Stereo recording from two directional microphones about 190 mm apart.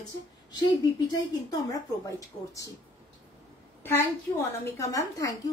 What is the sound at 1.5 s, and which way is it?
Speech, 20° left (ahead or behind).